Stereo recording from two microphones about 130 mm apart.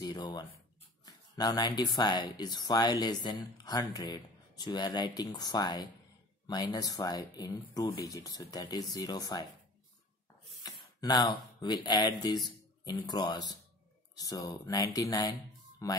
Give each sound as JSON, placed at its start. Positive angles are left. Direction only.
{"t": 0.0, "sound": "speech", "side_deg": 35}
{"t": 10.6, "sound": "a sound", "side_deg": 30}
{"t": 11.6, "sound": "speech", "side_deg": 35}